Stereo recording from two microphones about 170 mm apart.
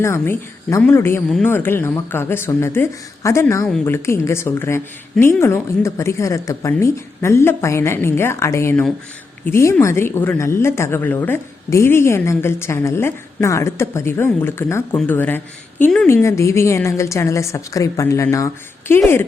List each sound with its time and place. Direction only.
0.0 s a woman's voice: 15° left (ahead or behind)
16.0 s speech: 15° left (ahead or behind)